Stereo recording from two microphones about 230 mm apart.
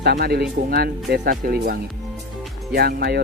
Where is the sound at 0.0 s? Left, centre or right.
Right.